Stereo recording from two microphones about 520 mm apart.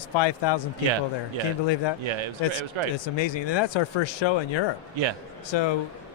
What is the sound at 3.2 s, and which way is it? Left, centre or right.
A man's voice, left.